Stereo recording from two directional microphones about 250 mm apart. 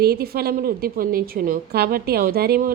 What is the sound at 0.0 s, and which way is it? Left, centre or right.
A woman's voice, right.